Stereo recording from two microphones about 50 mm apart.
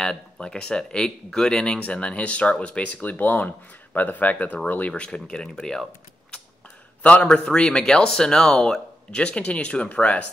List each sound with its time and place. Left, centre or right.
0.0 s speech: centre
7.0 s speech: left
9.1 s speech: left